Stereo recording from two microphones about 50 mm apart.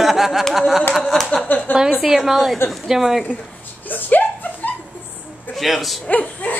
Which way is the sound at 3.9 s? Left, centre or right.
Left.